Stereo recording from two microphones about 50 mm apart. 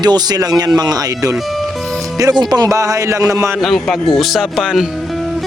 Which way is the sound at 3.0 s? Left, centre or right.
Right.